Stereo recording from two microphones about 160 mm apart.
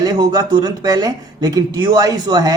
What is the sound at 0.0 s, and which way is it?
Speech, 25° right (ahead or behind).